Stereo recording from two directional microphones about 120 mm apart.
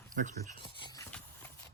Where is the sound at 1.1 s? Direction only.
10° left (ahead or behind).